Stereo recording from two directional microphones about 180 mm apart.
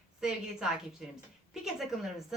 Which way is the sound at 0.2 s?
5° right (ahead or behind).